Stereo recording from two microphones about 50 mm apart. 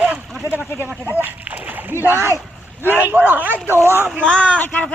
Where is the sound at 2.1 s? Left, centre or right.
Right.